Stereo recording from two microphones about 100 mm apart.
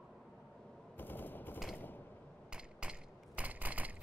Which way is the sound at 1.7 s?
20° left (ahead or behind).